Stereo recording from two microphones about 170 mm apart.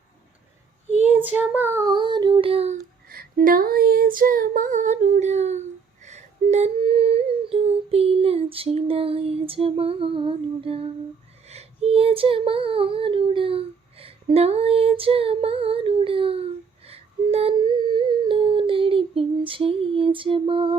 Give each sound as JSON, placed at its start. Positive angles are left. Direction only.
{"t": 1.0, "sound": "child singing", "side_deg": -10}
{"t": 3.1, "sound": "female singing", "side_deg": -55}
{"t": 11.4, "sound": "child singing", "side_deg": -35}